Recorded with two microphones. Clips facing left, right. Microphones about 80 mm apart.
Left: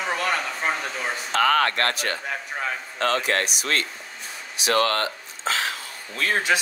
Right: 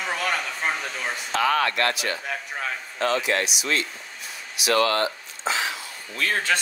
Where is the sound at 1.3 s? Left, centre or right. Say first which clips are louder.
Left 2 dB; left.